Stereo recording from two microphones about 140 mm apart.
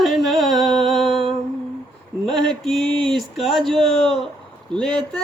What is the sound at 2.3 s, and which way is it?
Music, centre (ahead or behind).